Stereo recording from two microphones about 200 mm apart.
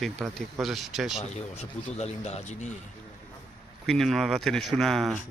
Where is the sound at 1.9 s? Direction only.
30° left (ahead or behind).